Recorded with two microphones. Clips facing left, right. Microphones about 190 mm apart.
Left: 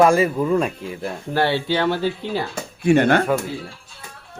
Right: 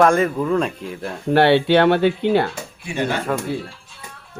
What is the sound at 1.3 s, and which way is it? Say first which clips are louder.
Speech: right 7 dB; 70° right (ahead or behind).